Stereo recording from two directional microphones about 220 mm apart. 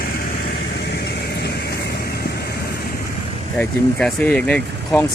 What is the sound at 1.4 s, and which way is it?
Vehicle, 50° left (ahead or behind).